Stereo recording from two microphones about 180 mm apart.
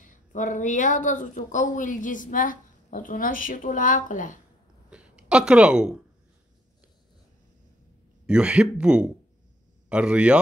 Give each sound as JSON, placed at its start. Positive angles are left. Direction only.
{"t": 0.0, "sound": "speech", "side_deg": 45}
{"t": 4.8, "sound": "a sound", "side_deg": -5}
{"t": 8.3, "sound": "a man's voice", "side_deg": -5}